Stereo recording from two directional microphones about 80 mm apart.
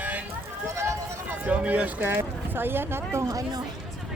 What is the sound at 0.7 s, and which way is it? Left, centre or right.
Run, right.